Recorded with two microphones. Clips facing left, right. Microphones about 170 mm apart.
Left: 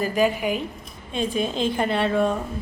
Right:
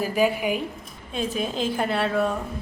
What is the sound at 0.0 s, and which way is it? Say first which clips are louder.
A woman's voice: left 1 dB; 10° right (ahead or behind).